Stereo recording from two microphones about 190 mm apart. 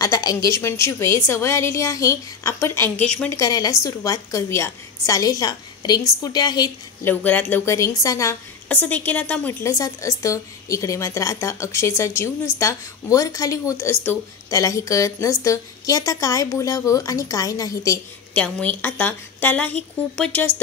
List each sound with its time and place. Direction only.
0.0 s a woman's voice: 20° left (ahead or behind)
3.3 s a woman's voice: 20° left (ahead or behind)
7.1 s a woman's voice: 10° left (ahead or behind)
18.3 s a woman's voice: 5° left (ahead or behind)